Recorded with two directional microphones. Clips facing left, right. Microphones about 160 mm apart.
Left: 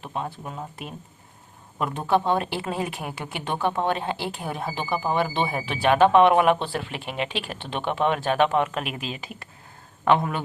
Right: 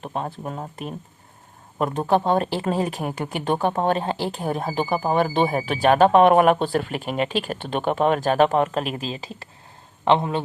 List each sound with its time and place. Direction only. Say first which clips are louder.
0.0 s speech: right 3 dB; 40° right (ahead or behind); by 10.4 s 25° right (ahead or behind)